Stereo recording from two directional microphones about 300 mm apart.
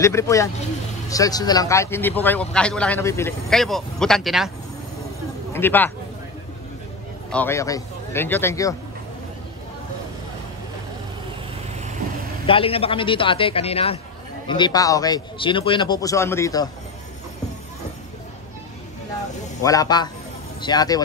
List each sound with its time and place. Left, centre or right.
0.0 s speech: centre
5.5 s speech: centre
7.2 s speech: centre
12.4 s speech: centre
19.6 s speech: centre